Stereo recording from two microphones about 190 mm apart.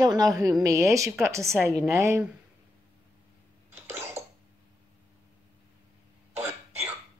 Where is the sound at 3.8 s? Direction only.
15° right (ahead or behind).